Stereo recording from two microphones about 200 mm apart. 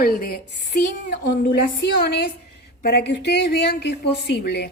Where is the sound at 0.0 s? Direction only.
50° left (ahead or behind).